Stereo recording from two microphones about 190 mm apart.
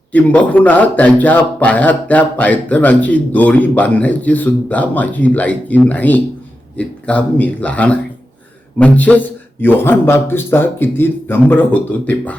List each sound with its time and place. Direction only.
0.1 s speech: 10° left (ahead or behind)